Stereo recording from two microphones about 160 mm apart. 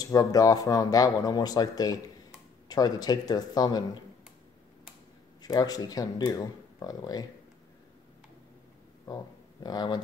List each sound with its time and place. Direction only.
0.0 s speech: 20° left (ahead or behind)
5.4 s speech: 25° left (ahead or behind)
9.0 s a sound: 25° left (ahead or behind)